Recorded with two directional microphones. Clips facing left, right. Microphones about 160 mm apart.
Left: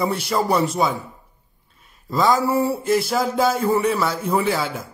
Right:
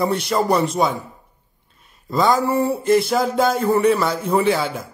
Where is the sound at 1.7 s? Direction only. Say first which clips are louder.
Right 1 dB; centre (ahead or behind).